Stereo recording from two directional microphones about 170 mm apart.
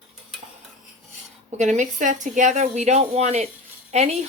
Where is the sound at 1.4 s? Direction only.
45° right (ahead or behind).